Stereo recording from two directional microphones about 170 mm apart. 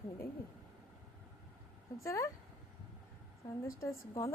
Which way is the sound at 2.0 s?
20° left (ahead or behind).